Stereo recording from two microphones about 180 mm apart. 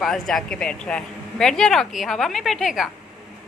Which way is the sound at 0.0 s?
Centre (ahead or behind).